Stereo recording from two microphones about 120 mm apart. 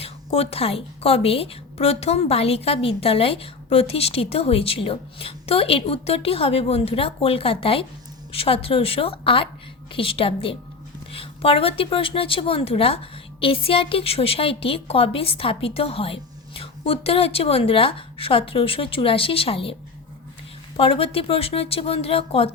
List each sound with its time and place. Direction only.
0.0 s a woman's voice: 55° left (ahead or behind)
20.7 s a woman's voice: 50° left (ahead or behind)